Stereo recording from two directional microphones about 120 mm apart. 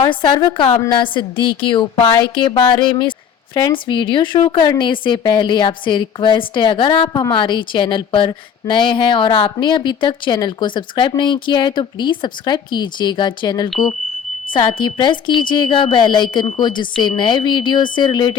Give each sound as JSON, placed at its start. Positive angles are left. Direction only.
{"t": 0.0, "sound": "a woman's voice", "side_deg": 45}